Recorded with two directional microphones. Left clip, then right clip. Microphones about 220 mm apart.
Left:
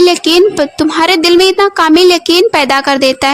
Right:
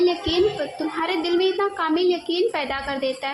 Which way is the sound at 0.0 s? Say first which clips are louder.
Left 13 dB; 55° left (ahead or behind).